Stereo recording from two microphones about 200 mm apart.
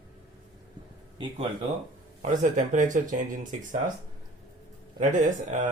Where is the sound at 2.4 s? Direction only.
40° right (ahead or behind).